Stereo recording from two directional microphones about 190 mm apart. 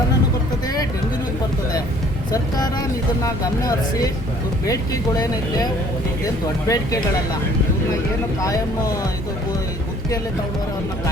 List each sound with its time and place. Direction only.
2.3 s music: 20° left (ahead or behind)
3.2 s speech: 20° left (ahead or behind)
8.4 s speech: 20° left (ahead or behind)